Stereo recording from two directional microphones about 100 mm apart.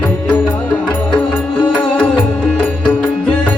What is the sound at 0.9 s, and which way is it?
Music, 10° left (ahead or behind).